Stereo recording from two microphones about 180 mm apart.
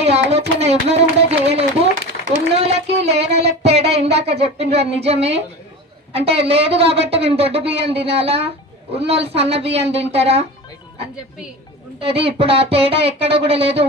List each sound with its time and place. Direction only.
0.1 s speech: 35° right (ahead or behind)
12.0 s speech: 30° right (ahead or behind)